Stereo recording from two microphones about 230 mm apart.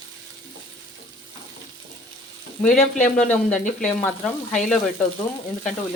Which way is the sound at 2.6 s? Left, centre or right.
Centre.